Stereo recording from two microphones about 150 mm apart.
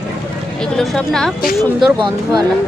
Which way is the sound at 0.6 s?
5° left (ahead or behind).